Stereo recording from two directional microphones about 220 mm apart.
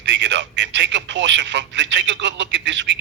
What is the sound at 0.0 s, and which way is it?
A man's voice, 55° right (ahead or behind).